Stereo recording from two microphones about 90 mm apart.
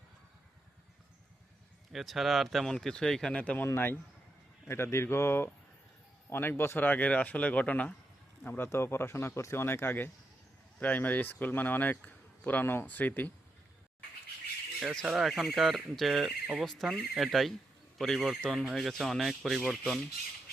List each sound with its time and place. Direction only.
1.9 s speech: centre (ahead or behind); by 3.7 s 15° left (ahead or behind)
3.7 s speech: 25° left (ahead or behind)
14.9 s speech: centre (ahead or behind)